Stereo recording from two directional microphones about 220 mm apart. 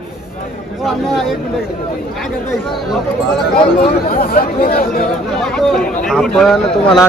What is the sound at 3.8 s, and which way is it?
Speech, 40° left (ahead or behind).